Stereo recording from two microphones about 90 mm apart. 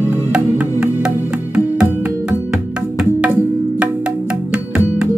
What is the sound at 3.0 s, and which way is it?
Music, 15° right (ahead or behind).